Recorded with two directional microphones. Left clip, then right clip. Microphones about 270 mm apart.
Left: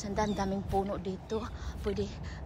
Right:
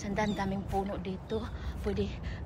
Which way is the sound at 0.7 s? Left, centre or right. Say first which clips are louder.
Left 2 dB; left.